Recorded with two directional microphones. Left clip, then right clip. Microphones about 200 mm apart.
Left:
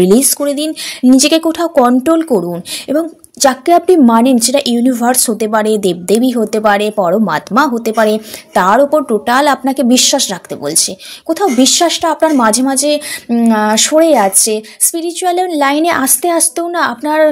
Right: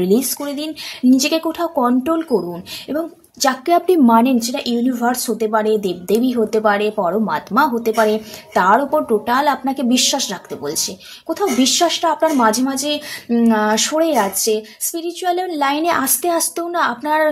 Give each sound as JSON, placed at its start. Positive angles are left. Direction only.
{"t": 0.0, "sound": "a woman's voice", "side_deg": 35}